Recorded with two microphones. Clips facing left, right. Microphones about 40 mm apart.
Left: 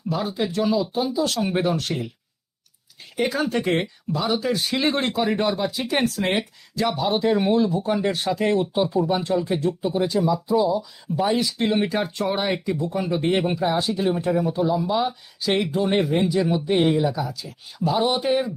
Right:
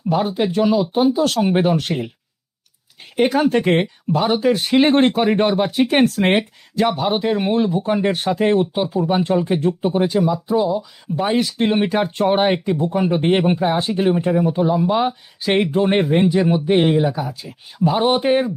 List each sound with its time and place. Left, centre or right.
0.1 s speech: right
3.2 s speech: right
7.2 s speech: centre
7.5 s speech: right
14.1 s speech: right